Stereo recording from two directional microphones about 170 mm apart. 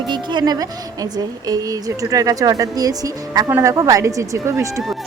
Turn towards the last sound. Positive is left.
turn(degrees=-20)  # may be behind; listen again after turning